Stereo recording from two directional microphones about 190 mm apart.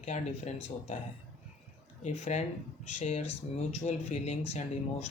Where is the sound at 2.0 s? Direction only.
35° left (ahead or behind).